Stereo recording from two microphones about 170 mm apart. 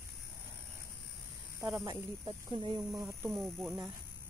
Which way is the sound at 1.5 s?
15° right (ahead or behind).